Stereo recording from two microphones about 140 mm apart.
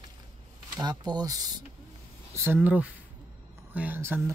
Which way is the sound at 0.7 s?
30° right (ahead or behind).